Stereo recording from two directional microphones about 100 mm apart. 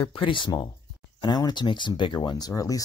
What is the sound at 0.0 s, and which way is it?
Speech, 60° left (ahead or behind).